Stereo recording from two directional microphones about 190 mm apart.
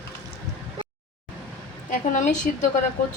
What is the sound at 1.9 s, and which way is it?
Speech, 40° left (ahead or behind).